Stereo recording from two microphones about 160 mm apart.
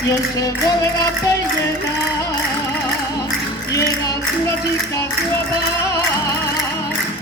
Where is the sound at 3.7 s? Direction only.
20° left (ahead or behind).